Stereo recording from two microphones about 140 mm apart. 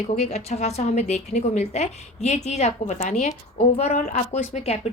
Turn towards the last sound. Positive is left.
turn(degrees=55)  # may be behind; listen again after turning